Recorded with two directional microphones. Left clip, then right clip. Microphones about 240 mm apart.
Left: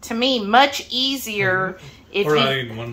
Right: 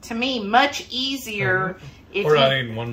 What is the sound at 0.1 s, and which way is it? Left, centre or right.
A woman's voice, left.